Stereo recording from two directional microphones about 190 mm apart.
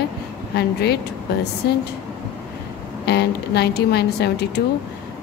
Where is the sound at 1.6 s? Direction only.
55° left (ahead or behind).